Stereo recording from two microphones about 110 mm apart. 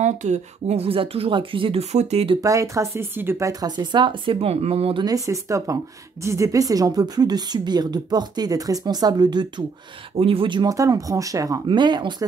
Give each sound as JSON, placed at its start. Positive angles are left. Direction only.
{"t": 0.0, "sound": "speech", "side_deg": -90}
{"t": 2.4, "sound": "a woman's voice", "side_deg": -30}
{"t": 5.0, "sound": "a woman's voice", "side_deg": -30}
{"t": 10.1, "sound": "speech", "side_deg": -60}
{"t": 10.7, "sound": "a woman's voice", "side_deg": -30}
{"t": 11.6, "sound": "speech", "side_deg": -45}